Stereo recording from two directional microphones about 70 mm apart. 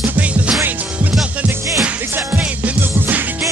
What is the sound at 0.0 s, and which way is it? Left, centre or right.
Music, centre.